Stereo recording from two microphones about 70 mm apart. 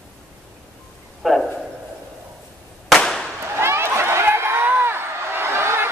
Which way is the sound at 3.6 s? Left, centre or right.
Right.